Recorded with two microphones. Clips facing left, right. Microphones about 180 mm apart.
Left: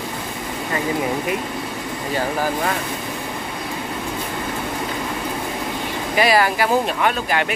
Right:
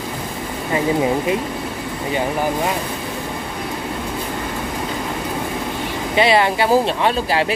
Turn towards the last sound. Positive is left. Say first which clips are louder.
# right 2 dB
turn(degrees=-30)  # may be behind; listen again after turning